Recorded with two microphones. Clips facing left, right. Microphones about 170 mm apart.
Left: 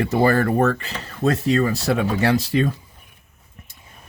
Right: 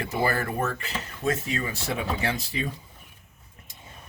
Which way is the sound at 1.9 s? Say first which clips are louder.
Left 8 dB; 85° left.